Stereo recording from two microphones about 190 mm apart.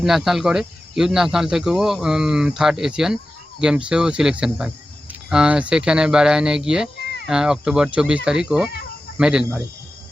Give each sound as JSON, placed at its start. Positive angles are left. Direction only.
{"t": 0.0, "sound": "speech", "side_deg": 0}
{"t": 7.0, "sound": "a sound", "side_deg": 55}
{"t": 7.3, "sound": "speech", "side_deg": -5}